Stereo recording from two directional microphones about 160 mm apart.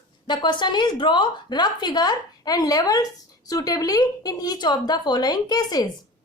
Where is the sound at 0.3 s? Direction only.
30° left (ahead or behind).